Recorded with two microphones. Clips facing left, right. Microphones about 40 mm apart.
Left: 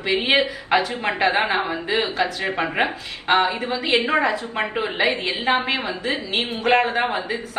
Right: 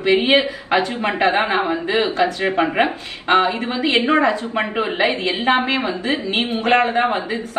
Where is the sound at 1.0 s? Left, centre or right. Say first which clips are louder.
Right 3 dB; right.